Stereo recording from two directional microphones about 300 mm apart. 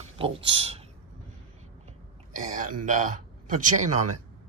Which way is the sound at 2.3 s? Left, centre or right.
Right.